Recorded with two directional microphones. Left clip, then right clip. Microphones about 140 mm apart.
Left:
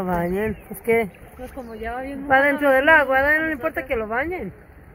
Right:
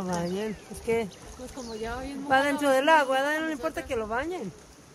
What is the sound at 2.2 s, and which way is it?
Speech, 15° left (ahead or behind).